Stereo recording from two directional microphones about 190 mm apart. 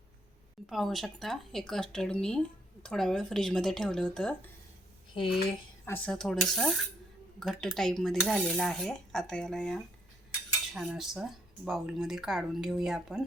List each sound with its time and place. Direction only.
0.7 s speech: centre (ahead or behind)
5.1 s speech: 25° left (ahead or behind)
5.8 s speech: 10° left (ahead or behind)